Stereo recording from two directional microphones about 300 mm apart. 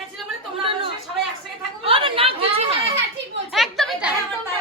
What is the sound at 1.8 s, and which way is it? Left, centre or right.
Chatter, centre.